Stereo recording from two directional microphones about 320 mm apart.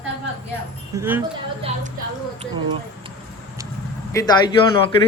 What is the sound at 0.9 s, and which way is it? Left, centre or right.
Speech, centre.